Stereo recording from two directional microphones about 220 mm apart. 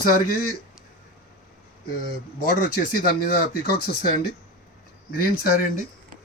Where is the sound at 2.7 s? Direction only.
45° left (ahead or behind).